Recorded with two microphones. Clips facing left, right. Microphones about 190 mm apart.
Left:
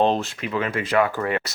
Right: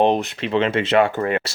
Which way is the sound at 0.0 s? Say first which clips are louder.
Right 3 dB; 15° right (ahead or behind).